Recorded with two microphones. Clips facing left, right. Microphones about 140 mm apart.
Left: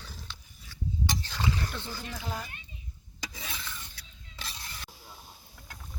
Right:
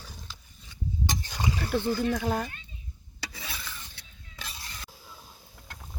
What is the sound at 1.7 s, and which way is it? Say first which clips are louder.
Speech: right 13 dB; 50° right (ahead or behind).